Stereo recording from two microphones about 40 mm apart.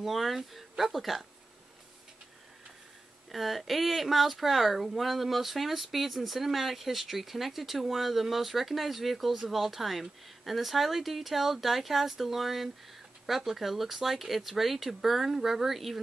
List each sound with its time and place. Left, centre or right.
0.0 s a woman's voice: centre
3.3 s a woman's voice: centre